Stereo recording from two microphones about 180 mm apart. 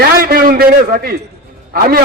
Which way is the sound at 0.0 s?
55° right (ahead or behind).